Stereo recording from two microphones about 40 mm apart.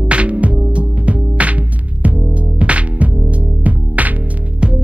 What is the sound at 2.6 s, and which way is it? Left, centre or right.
Music, right.